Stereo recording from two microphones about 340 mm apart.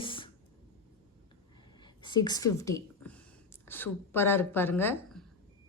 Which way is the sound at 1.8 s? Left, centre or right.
Centre.